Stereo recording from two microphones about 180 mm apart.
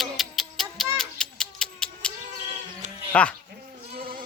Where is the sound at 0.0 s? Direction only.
Centre (ahead or behind).